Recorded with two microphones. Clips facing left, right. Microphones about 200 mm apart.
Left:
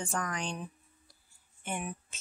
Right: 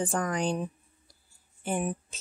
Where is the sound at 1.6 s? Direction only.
35° right (ahead or behind).